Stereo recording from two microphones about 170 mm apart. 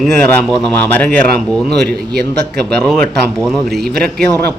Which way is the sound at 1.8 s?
70° right (ahead or behind).